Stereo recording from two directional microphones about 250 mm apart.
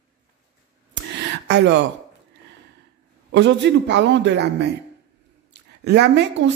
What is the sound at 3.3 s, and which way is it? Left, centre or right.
Speech, right.